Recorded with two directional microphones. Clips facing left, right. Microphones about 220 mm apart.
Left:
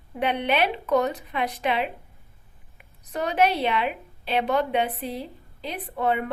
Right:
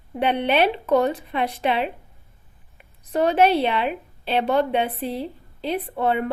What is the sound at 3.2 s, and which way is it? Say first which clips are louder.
A woman's voice: right 5 dB; 30° right (ahead or behind).